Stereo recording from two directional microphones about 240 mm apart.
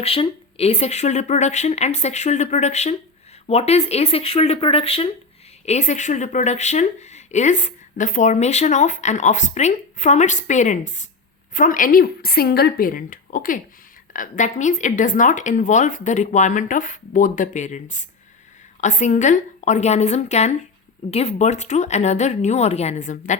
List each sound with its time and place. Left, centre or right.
0.0 s a woman's voice: left